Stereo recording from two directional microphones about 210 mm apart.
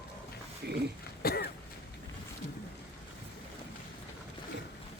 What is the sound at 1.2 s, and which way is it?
Throat clearing, 45° left (ahead or behind).